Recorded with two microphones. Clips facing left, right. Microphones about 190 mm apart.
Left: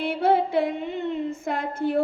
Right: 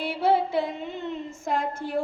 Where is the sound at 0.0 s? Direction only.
55° left (ahead or behind).